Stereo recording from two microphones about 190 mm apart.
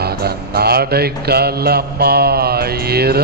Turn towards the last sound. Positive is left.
turn(degrees=-55)  # may be behind; listen again after turning